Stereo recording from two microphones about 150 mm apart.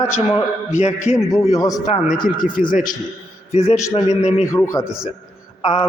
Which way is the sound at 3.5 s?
45° left (ahead or behind).